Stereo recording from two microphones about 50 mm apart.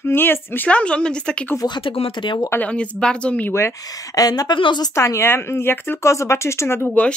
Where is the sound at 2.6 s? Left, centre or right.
Left.